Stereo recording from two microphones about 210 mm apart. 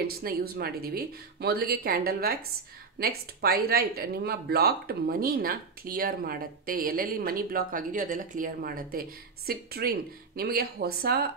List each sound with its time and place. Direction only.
0.0 s speech: 45° right (ahead or behind)